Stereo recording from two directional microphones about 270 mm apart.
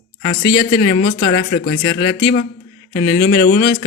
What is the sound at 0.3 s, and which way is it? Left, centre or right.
Speech, centre.